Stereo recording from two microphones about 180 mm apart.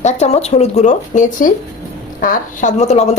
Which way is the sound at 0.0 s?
40° left (ahead or behind).